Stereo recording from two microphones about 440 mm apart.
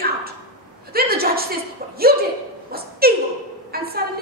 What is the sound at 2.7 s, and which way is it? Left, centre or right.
A woman's voice, right.